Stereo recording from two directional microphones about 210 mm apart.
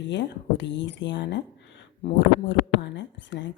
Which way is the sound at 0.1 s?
55° left (ahead or behind).